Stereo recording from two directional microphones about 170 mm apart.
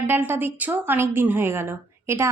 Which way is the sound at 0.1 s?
10° right (ahead or behind).